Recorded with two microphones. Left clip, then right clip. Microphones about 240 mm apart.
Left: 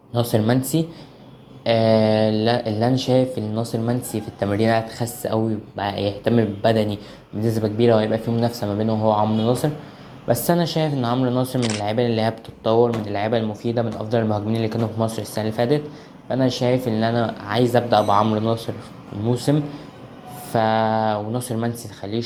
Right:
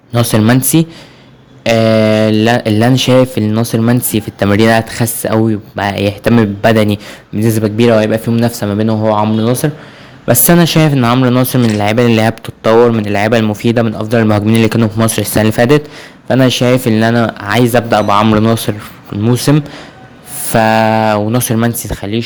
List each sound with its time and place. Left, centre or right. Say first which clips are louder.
0.1 s speech: right 9 dB; right
16.6 s speech: right 10 dB; right
18.7 s mantra: right 12 dB; right
19.2 s speech: right 9 dB; right
20.5 s mantra: right 9 dB; right
21.0 s speech: right 10 dB; right